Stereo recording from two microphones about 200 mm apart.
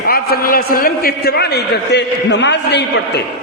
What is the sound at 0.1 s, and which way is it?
A man's voice, 45° left (ahead or behind).